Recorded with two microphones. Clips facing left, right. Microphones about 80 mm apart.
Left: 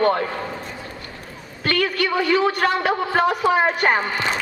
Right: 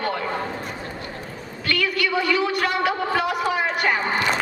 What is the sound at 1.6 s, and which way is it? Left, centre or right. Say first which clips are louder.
A man's voice: left 2 dB; left.